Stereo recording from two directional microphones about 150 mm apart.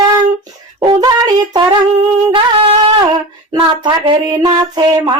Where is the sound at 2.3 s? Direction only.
40° right (ahead or behind).